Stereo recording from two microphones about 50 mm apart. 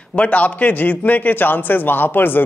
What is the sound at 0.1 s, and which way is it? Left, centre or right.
A man's voice, left.